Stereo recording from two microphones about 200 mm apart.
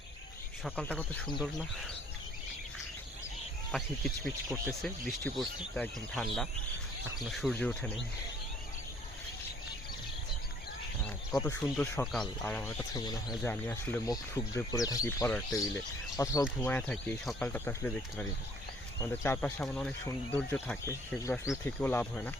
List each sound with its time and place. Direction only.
0.6 s speech: 5° left (ahead or behind)
3.7 s speech: centre (ahead or behind)
11.3 s speech: 10° left (ahead or behind)
12.9 s speech: 20° left (ahead or behind)